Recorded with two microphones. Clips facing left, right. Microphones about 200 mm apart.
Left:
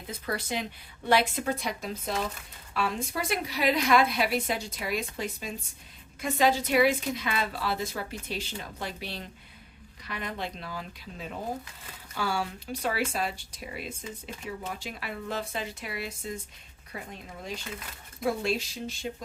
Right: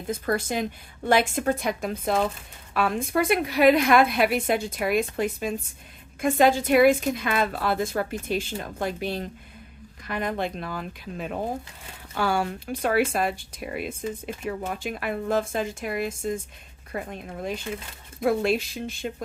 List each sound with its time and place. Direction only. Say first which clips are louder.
0.1 s a woman's voice: right 7 dB; 45° right (ahead or behind)